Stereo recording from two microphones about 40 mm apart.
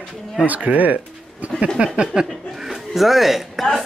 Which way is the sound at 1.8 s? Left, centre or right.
Right.